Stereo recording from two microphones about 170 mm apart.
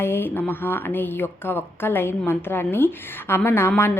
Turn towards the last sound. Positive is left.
turn(degrees=15)  # may be behind; listen again after turning